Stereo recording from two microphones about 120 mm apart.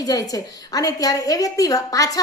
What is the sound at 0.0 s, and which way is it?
A woman's voice, 30° left (ahead or behind).